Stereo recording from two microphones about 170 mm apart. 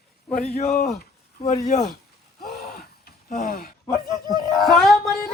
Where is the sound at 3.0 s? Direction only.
60° left (ahead or behind).